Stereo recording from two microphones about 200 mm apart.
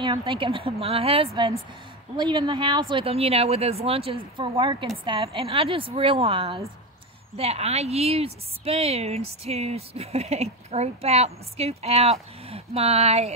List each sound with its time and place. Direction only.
0.0 s speech: 25° right (ahead or behind)